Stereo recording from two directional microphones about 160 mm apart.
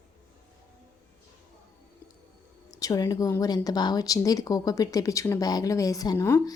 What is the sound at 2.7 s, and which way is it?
Speech, 20° left (ahead or behind).